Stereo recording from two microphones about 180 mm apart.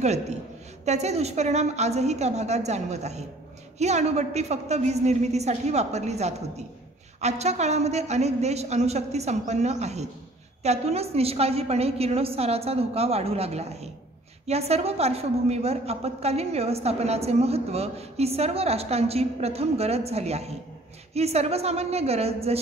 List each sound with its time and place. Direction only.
0.0 s a woman's voice: 40° right (ahead or behind)